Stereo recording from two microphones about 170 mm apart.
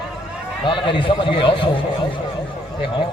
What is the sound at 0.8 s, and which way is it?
Speech, 30° left (ahead or behind).